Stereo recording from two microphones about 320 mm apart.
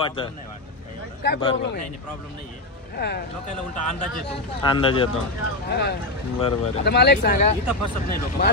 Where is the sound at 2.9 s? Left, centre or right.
Left.